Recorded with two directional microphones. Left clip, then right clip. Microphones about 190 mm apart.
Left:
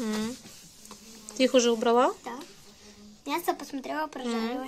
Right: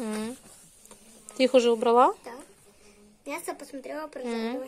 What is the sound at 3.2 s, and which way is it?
Speech, 30° left (ahead or behind).